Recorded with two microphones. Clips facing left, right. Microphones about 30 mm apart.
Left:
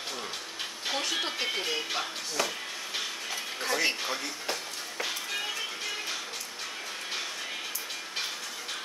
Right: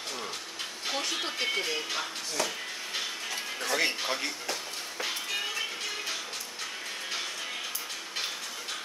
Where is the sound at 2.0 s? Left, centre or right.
Centre.